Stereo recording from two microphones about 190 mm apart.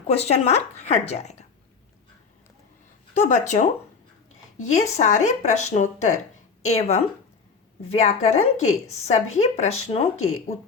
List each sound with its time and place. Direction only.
0.1 s speech: 35° left (ahead or behind)
3.2 s a woman's voice: 40° left (ahead or behind)